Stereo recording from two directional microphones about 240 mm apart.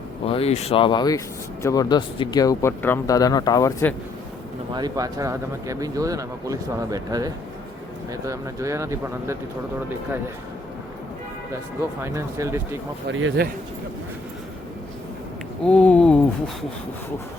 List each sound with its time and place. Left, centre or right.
0.3 s speech: left
4.7 s speech: centre
12.0 s speech: centre
13.1 s speech: right
15.6 s a sound: centre